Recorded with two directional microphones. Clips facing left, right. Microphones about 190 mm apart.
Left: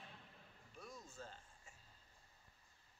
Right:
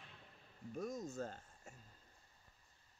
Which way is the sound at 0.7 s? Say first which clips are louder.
Right 12 dB; 45° right (ahead or behind).